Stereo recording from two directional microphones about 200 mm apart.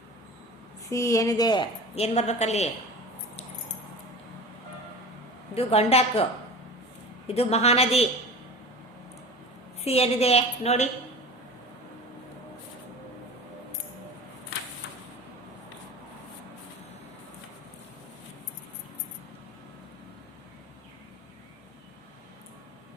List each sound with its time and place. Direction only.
0.9 s a woman's voice: 15° left (ahead or behind); by 2.6 s 35° left (ahead or behind)
5.5 s a woman's voice: 30° left (ahead or behind)
7.3 s a woman's voice: 30° left (ahead or behind)
9.8 s a woman's voice: 30° left (ahead or behind)